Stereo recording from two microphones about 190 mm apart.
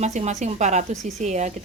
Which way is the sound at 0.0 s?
35° right (ahead or behind).